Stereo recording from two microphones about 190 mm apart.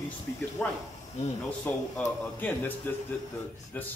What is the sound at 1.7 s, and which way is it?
Speech, 10° left (ahead or behind).